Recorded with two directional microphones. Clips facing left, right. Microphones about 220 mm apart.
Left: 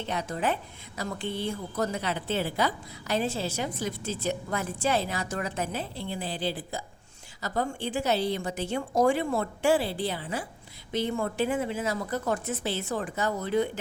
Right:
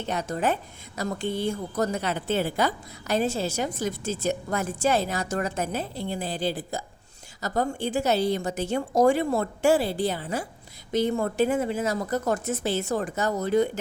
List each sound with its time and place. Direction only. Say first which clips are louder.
0.0 s a woman's voice: right 3 dB; 45° right (ahead or behind)